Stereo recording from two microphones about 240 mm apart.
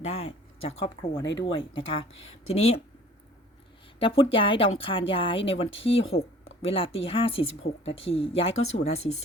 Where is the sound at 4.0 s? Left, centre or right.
Left.